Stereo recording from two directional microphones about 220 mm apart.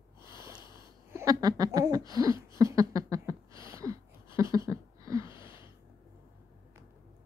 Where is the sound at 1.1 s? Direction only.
15° right (ahead or behind).